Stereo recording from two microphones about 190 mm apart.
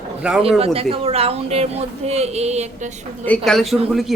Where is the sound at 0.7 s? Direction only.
30° right (ahead or behind).